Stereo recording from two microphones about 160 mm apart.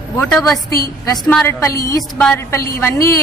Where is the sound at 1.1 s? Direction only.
10° left (ahead or behind).